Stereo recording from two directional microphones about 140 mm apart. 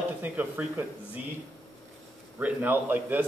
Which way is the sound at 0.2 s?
15° right (ahead or behind).